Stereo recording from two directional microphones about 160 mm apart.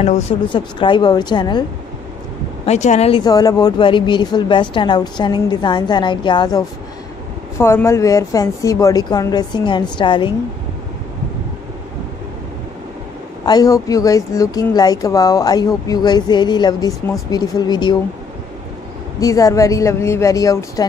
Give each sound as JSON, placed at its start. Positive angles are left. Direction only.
{"t": 0.5, "sound": "a woman's voice", "side_deg": 30}
{"t": 2.6, "sound": "speech", "side_deg": 45}
{"t": 3.3, "sound": "a woman's voice", "side_deg": 25}
{"t": 7.5, "sound": "a woman's voice", "side_deg": 15}
{"t": 13.5, "sound": "a woman's voice", "side_deg": 25}
{"t": 19.1, "sound": "a woman's voice", "side_deg": 20}